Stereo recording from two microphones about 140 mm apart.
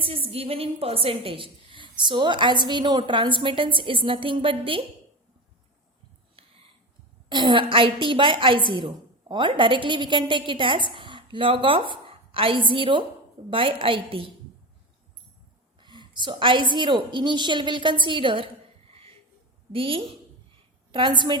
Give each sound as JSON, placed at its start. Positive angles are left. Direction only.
{"t": 0.0, "sound": "a woman's voice", "side_deg": -40}
{"t": 6.4, "sound": "a sound", "side_deg": -40}
{"t": 7.3, "sound": "a woman's voice", "side_deg": -35}
{"t": 15.8, "sound": "a woman's voice", "side_deg": -35}
{"t": 19.7, "sound": "a woman's voice", "side_deg": -40}